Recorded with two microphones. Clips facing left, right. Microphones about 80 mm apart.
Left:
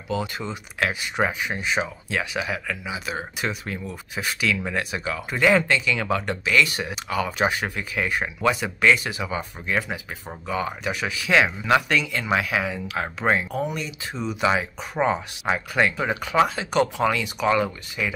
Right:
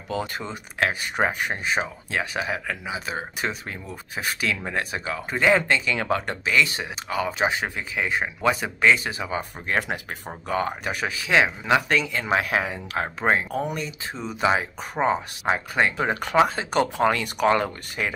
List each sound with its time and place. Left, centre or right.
0.1 s speech: right
9.7 s speech: right
11.2 s speech: right
11.9 s speech: right